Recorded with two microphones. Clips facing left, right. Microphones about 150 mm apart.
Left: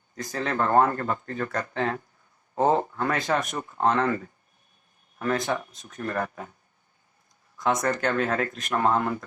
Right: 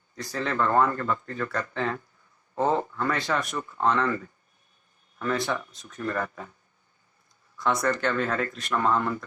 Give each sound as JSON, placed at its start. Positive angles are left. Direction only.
{"t": 0.2, "sound": "speech", "side_deg": 45}
{"t": 7.5, "sound": "speech", "side_deg": 45}